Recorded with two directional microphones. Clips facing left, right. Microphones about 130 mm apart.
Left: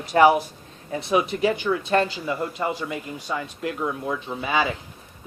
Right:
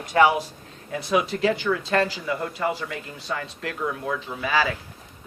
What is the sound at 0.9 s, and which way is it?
Speech, 25° left (ahead or behind).